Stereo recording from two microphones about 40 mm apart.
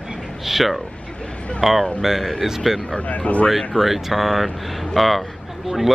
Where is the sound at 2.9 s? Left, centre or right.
Left.